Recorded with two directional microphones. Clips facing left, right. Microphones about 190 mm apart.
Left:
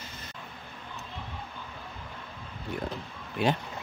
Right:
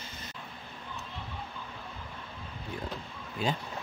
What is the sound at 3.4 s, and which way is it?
Speech, 70° left (ahead or behind).